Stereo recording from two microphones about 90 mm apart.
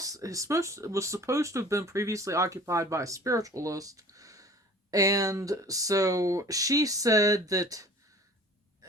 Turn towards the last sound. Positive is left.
turn(degrees=-40)  # may be behind; listen again after turning